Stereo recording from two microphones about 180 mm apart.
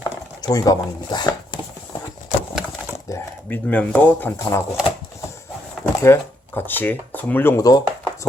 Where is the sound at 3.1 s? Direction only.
10° left (ahead or behind).